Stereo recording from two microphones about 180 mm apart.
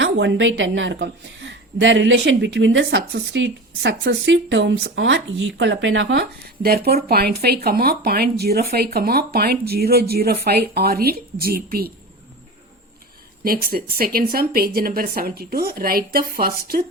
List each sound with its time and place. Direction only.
0.0 s a woman's voice: 85° right
6.6 s speech: 60° right (ahead or behind)
13.4 s speech: 55° right (ahead or behind)